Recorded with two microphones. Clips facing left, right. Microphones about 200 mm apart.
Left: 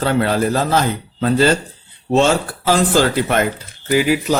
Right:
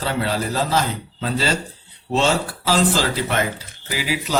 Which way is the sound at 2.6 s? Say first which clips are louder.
Left 5 dB; 55° left (ahead or behind).